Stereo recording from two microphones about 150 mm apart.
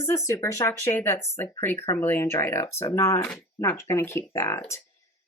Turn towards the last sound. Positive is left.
turn(degrees=15)  # may be behind; listen again after turning